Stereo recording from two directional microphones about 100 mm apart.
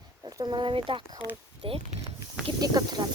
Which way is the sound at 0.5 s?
50° right (ahead or behind).